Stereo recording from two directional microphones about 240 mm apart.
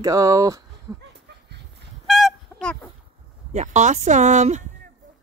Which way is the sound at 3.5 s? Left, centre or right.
Right.